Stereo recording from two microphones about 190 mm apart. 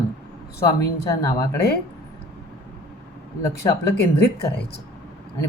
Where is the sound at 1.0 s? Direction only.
20° left (ahead or behind).